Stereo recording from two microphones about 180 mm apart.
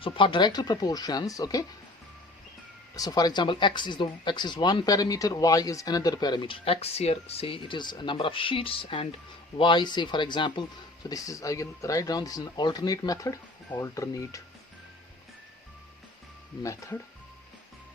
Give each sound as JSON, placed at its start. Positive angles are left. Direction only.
{"t": 0.0, "sound": "speech", "side_deg": 25}
{"t": 2.9, "sound": "speech", "side_deg": 20}
{"t": 16.6, "sound": "speech", "side_deg": 15}